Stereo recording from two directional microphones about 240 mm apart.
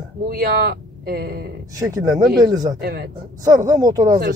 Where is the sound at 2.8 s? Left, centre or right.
Right.